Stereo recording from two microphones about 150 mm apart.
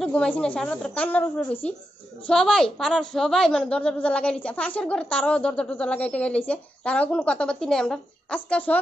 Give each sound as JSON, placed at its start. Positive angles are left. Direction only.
{"t": 0.0, "sound": "a woman's voice", "side_deg": 5}